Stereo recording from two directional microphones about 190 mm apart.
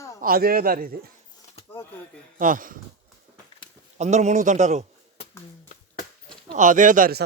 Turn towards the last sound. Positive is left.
turn(degrees=-50)  # may be behind; listen again after turning